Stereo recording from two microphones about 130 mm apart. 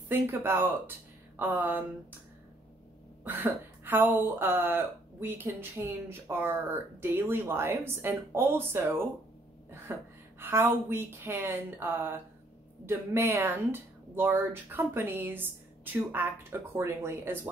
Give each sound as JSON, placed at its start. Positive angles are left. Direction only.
{"t": 0.1, "sound": "speech", "side_deg": -20}
{"t": 3.3, "sound": "speech", "side_deg": -15}
{"t": 9.9, "sound": "a sound", "side_deg": -20}
{"t": 10.4, "sound": "speech", "side_deg": -15}